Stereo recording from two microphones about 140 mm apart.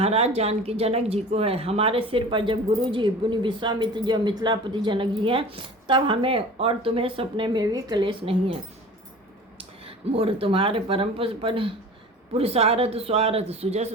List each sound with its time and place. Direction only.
0.0 s speech: 50° right (ahead or behind)
9.6 s speech: 40° right (ahead or behind)